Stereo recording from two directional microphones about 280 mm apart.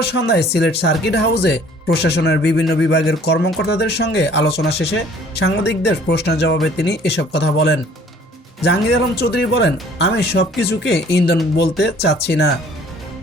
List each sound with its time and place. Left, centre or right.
0.2 s speech: left